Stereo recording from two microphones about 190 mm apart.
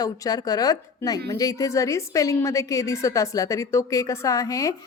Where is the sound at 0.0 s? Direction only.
20° left (ahead or behind).